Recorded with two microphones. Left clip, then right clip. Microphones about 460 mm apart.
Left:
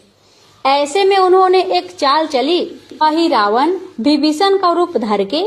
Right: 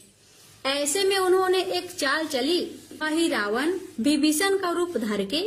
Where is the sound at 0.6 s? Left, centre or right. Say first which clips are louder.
Left 12 dB; right.